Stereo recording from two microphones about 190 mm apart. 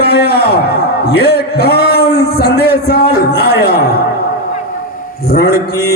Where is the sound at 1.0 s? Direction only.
55° left (ahead or behind).